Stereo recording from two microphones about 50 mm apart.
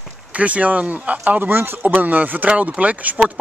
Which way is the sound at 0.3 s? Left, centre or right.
Right.